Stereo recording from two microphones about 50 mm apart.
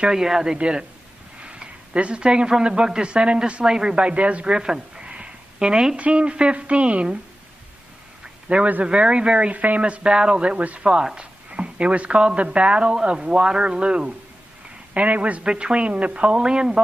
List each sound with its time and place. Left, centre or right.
0.1 s speech: centre; by 4.6 s right
4.6 s a sound: centre
5.9 s speech: right
8.5 s speech: right
15.4 s speech: centre